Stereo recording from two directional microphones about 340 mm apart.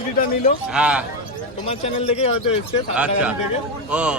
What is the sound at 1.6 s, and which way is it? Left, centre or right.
Speech, centre.